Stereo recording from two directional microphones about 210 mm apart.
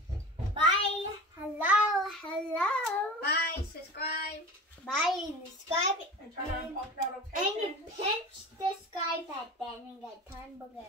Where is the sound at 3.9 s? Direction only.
50° left (ahead or behind).